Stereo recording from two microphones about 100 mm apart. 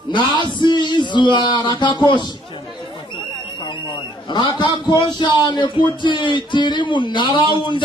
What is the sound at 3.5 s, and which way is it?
A man's voice, 50° left (ahead or behind).